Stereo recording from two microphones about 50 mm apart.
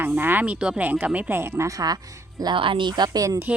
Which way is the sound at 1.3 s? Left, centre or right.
Right.